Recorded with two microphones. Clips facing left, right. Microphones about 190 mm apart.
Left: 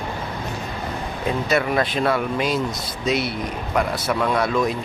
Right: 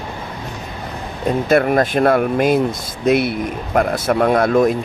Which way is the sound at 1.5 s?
50° right (ahead or behind).